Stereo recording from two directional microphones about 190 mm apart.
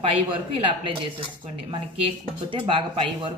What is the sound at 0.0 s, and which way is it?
Speech, 30° right (ahead or behind).